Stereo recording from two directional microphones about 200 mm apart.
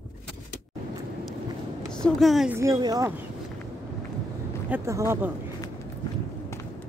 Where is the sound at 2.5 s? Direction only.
15° right (ahead or behind).